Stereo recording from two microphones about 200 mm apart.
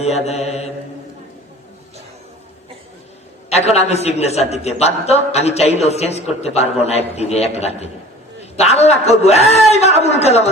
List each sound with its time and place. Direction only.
0.0 s a man's voice: 30° left (ahead or behind)
3.5 s a man's voice: 30° left (ahead or behind)